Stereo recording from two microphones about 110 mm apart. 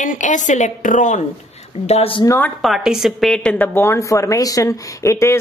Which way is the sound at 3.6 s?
20° left (ahead or behind).